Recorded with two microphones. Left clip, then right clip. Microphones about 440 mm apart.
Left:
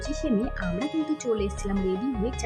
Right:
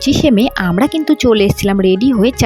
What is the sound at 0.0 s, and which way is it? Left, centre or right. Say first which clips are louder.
Speech: right 16 dB; centre.